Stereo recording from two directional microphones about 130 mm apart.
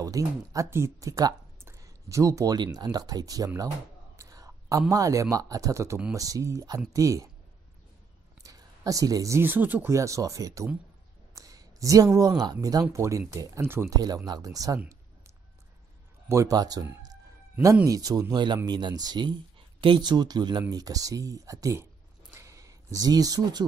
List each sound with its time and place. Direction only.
0.0 s speech: 25° right (ahead or behind)
8.4 s speech: 25° right (ahead or behind)
16.3 s speech: 25° right (ahead or behind)
17.8 s speech: 30° right (ahead or behind)
22.3 s a sound: 25° right (ahead or behind)